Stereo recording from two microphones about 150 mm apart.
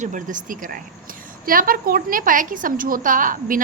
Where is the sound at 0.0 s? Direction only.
60° right (ahead or behind).